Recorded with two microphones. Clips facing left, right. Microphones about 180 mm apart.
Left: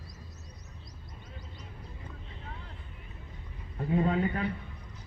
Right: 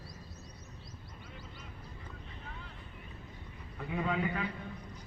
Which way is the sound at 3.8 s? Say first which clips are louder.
Left 6 dB; 35° left (ahead or behind).